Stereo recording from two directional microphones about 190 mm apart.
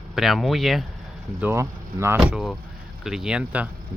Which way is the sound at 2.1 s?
5° right (ahead or behind).